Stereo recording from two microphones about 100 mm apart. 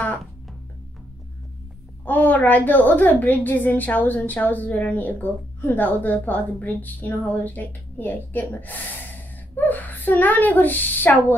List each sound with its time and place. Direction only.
2.0 s a woman's voice: 15° left (ahead or behind)